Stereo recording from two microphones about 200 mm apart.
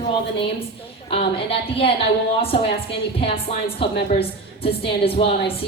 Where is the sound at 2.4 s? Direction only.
30° left (ahead or behind).